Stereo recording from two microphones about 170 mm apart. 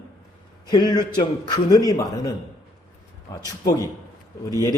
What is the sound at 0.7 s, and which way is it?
A man's voice, 25° left (ahead or behind).